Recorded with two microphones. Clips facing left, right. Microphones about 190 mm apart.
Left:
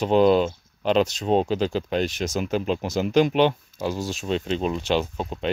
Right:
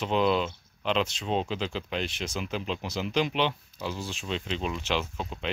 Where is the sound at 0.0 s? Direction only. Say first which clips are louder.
Left 8 dB; 40° left (ahead or behind).